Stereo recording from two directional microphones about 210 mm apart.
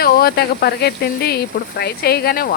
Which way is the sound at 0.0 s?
45° left (ahead or behind).